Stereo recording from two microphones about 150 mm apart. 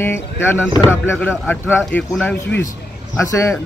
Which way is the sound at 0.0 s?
15° left (ahead or behind).